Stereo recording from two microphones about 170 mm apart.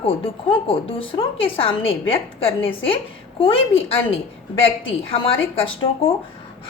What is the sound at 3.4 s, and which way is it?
Speech, 35° left (ahead or behind).